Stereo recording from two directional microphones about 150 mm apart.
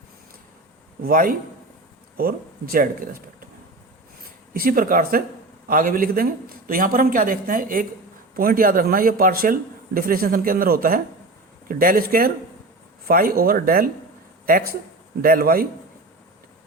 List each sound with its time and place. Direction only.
1.0 s a man's voice: 70° right (ahead or behind)
4.5 s a man's voice: 70° right (ahead or behind)